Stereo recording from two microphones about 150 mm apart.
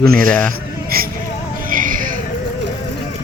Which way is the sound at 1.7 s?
65° right (ahead or behind).